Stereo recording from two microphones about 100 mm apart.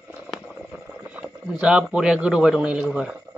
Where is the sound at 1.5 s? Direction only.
10° right (ahead or behind).